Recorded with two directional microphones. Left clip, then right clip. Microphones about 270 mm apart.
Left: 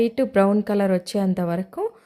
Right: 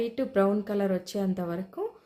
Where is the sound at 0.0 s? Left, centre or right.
Left.